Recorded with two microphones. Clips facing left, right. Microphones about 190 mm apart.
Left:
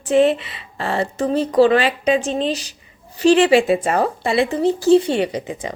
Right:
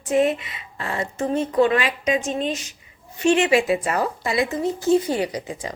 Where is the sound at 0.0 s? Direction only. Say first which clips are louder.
Left 5 dB; 30° left (ahead or behind).